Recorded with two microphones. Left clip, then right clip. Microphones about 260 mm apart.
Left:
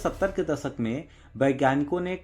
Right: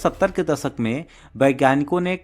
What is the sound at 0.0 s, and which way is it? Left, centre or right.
A man's voice, right.